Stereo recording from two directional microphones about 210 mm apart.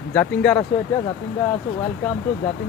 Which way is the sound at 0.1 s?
5° left (ahead or behind).